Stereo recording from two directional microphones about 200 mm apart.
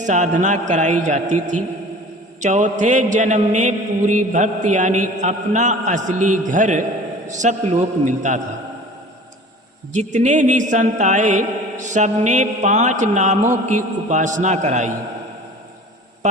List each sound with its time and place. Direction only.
0.0 s a man's voice: 40° right (ahead or behind)
9.9 s a man's voice: 35° right (ahead or behind)